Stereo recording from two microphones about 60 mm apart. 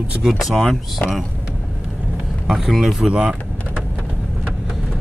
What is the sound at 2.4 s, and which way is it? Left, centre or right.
Speech, centre.